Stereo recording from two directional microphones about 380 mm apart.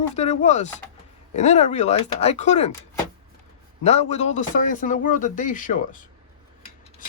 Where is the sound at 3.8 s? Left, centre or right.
Centre.